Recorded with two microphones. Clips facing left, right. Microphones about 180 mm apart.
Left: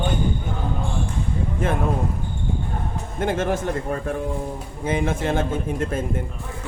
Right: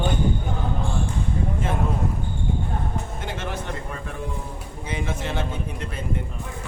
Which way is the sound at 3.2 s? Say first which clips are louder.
Left 9 dB; 50° left (ahead or behind).